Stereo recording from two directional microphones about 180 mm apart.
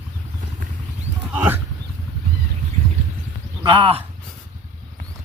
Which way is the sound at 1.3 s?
10° right (ahead or behind).